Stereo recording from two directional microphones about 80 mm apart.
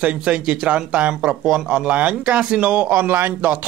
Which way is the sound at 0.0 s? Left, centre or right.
Centre.